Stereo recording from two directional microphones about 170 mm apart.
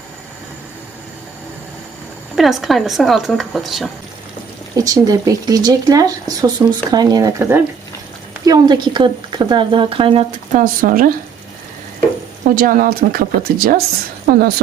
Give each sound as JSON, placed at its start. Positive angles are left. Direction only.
{"t": 2.3, "sound": "speech", "side_deg": 0}
{"t": 4.7, "sound": "speech", "side_deg": -20}
{"t": 10.5, "sound": "speech", "side_deg": -50}
{"t": 12.5, "sound": "a woman's voice", "side_deg": -55}